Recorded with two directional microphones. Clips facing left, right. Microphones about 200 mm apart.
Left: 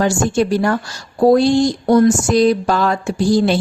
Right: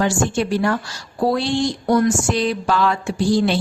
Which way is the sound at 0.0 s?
40° left (ahead or behind).